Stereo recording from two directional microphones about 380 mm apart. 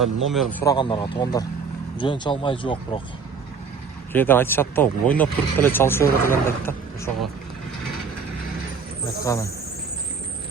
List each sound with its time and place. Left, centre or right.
0.0 s speech: centre
4.1 s speech: centre
9.2 s speech: centre